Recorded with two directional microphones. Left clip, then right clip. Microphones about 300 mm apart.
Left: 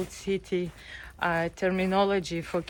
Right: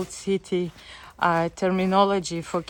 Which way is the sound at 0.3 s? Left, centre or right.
Centre.